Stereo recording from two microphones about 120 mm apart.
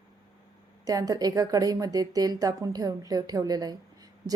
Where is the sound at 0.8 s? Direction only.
30° right (ahead or behind).